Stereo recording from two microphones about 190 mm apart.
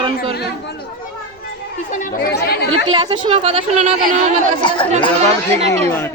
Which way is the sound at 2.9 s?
25° right (ahead or behind).